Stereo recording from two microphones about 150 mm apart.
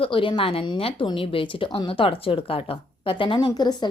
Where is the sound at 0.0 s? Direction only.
35° left (ahead or behind).